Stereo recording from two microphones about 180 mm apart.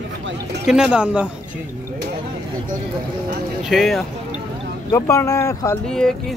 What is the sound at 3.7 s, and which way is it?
Speech, centre (ahead or behind).